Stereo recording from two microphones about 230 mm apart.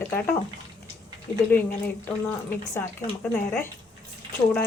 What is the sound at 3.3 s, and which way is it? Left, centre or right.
Speech, centre.